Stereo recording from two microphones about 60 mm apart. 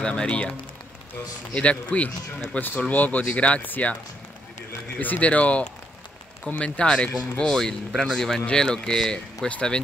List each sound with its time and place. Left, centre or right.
0.0 s speech: centre
4.9 s speech: left